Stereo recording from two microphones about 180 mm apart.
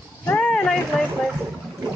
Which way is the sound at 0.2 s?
10° left (ahead or behind).